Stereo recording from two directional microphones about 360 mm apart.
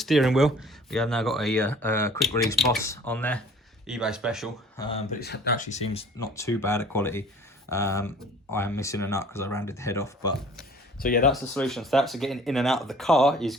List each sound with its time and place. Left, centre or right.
0.0 s speech: centre
4.8 s speech: centre
11.0 s speech: left
11.3 s speech: centre